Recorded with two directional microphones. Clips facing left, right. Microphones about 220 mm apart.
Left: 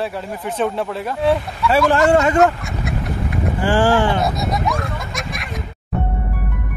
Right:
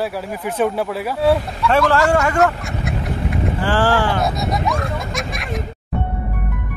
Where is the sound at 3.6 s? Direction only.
20° left (ahead or behind).